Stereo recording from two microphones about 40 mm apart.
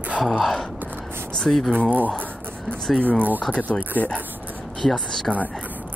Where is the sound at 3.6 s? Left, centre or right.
Left.